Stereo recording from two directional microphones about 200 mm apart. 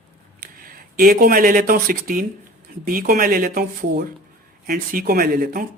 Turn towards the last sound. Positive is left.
turn(degrees=-45)  # may be behind; listen again after turning